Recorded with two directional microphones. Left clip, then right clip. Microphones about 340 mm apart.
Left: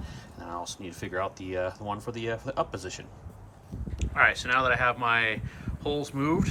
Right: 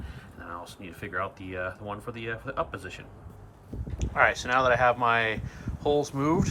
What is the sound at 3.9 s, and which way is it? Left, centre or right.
Speech, centre.